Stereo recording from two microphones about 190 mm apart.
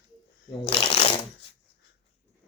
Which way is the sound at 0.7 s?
30° left (ahead or behind).